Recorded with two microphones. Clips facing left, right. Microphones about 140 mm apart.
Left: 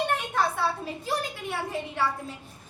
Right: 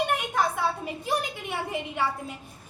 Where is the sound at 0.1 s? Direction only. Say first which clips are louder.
Right 1 dB; 15° right (ahead or behind).